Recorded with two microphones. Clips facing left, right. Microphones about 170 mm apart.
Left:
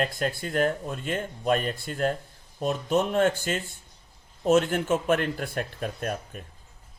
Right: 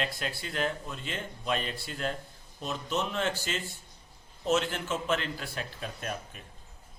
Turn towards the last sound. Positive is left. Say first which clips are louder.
# left 6 dB
turn(degrees=45)  # may be behind; listen again after turning